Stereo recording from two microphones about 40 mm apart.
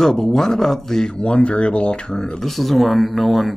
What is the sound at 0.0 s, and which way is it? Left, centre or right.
Speech, centre.